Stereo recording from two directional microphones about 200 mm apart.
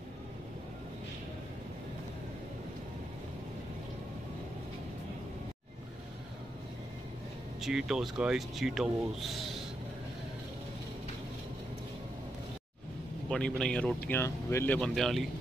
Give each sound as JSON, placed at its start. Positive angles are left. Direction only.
{"t": 7.6, "sound": "speech", "side_deg": 0}
{"t": 13.3, "sound": "speech", "side_deg": 5}